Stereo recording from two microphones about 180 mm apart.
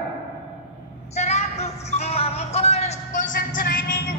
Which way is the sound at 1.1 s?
40° left (ahead or behind).